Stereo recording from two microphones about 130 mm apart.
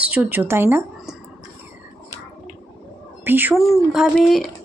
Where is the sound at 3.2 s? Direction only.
15° right (ahead or behind).